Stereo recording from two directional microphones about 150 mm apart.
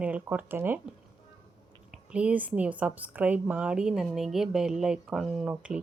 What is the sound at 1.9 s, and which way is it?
A woman's voice, 5° right (ahead or behind).